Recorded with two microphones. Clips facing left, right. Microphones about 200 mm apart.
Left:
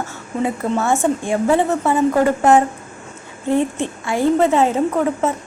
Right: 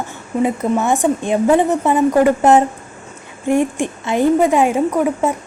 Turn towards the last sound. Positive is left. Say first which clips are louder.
# right 2 dB
turn(degrees=-15)  # may be behind; listen again after turning